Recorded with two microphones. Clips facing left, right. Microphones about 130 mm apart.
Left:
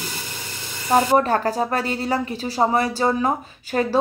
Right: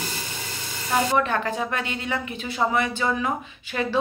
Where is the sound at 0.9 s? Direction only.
40° left (ahead or behind).